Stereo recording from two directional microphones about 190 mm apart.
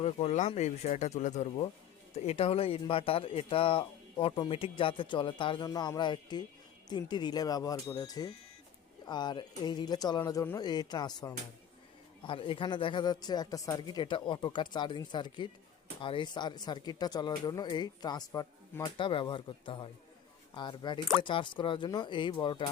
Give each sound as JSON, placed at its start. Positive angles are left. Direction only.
{"t": 0.0, "sound": "speech", "side_deg": 35}